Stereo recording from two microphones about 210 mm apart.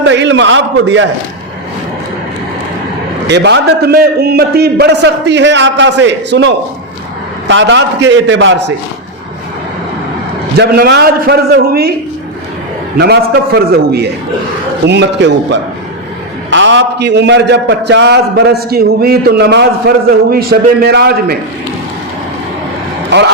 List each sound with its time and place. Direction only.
0.0 s a man's voice: 60° right (ahead or behind)
3.2 s a man's voice: 55° right (ahead or behind)
10.6 s a man's voice: 50° right (ahead or behind)
13.0 s a man's voice: 50° right (ahead or behind)
23.0 s speech: 55° right (ahead or behind)